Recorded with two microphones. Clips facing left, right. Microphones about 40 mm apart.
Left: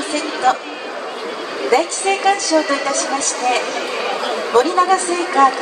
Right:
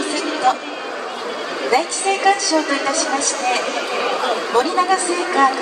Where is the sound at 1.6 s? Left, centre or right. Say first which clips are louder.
Left 2 dB; left.